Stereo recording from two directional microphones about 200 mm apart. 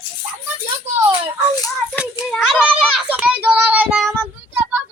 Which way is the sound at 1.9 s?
Centre (ahead or behind).